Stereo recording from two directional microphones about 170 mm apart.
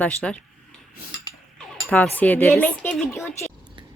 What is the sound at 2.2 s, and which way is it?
Speech, 10° left (ahead or behind).